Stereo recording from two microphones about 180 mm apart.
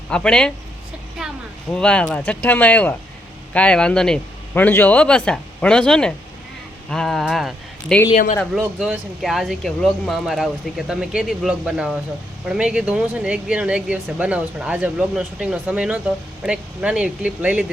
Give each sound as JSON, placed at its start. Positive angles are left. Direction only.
{"t": 0.1, "sound": "speech", "side_deg": 5}
{"t": 1.2, "sound": "a sound", "side_deg": -5}
{"t": 1.7, "sound": "speech", "side_deg": 5}
{"t": 8.1, "sound": "speech", "side_deg": 45}
{"t": 8.5, "sound": "speech", "side_deg": -5}